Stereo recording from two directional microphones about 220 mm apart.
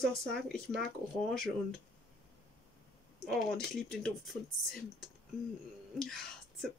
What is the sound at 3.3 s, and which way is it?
Speech, centre (ahead or behind).